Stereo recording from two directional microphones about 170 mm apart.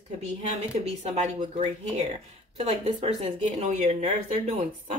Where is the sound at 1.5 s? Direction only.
40° right (ahead or behind).